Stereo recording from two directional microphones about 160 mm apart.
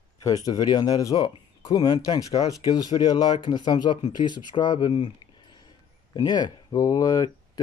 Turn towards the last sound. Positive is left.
turn(degrees=20)  # may be behind; listen again after turning